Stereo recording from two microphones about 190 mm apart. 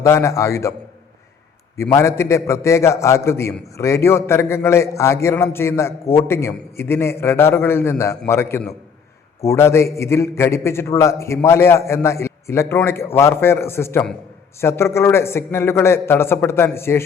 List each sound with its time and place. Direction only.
0.0 s a man's voice: 15° left (ahead or behind)
1.8 s a man's voice: 15° left (ahead or behind)